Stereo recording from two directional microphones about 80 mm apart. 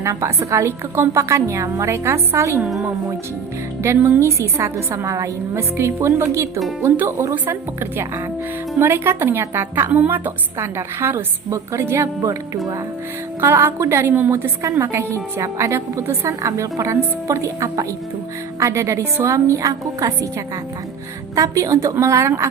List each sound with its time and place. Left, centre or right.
0.0 s a woman's voice: right
4.2 s a woman's voice: right
13.4 s a woman's voice: right
14.1 s a woman's voice: right
21.3 s a woman's voice: right